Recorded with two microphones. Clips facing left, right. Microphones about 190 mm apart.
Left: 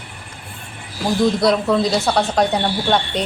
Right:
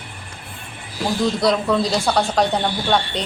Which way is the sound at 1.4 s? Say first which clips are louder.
Left 2 dB; 10° left (ahead or behind).